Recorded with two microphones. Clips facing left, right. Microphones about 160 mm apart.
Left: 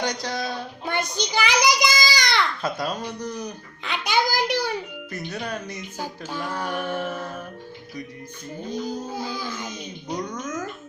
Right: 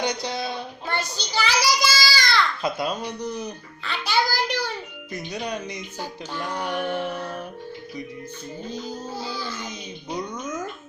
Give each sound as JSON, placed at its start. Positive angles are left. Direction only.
{"t": 0.0, "sound": "speech", "side_deg": -10}
{"t": 1.1, "sound": "music", "side_deg": 15}
{"t": 1.5, "sound": "child singing", "side_deg": 20}
{"t": 2.6, "sound": "speech", "side_deg": -10}
{"t": 3.4, "sound": "music", "side_deg": 15}
{"t": 5.1, "sound": "speech", "side_deg": -15}
{"t": 6.0, "sound": "music", "side_deg": 10}
{"t": 8.7, "sound": "music", "side_deg": 10}
{"t": 9.6, "sound": "music", "side_deg": -10}